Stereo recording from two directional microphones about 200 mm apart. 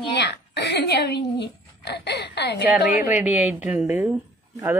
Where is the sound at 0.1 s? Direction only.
55° left (ahead or behind).